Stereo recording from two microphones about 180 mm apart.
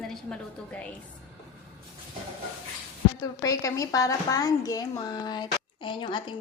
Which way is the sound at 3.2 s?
20° left (ahead or behind).